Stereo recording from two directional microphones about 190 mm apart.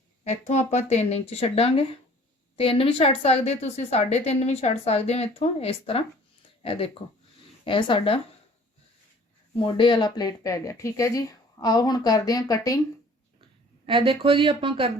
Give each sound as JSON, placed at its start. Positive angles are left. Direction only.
{"t": 0.3, "sound": "a woman's voice", "side_deg": 35}
{"t": 9.6, "sound": "speech", "side_deg": 25}
{"t": 13.8, "sound": "speech", "side_deg": -25}